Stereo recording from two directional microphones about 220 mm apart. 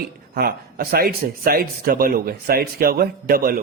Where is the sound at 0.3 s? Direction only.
45° right (ahead or behind).